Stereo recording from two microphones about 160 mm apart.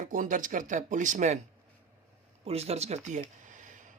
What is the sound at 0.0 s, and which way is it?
Speech, 55° right (ahead or behind).